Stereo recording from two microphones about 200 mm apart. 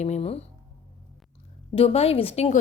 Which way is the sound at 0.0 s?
30° left (ahead or behind).